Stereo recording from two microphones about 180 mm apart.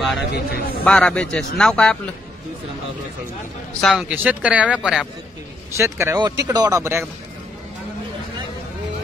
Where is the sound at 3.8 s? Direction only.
Centre (ahead or behind).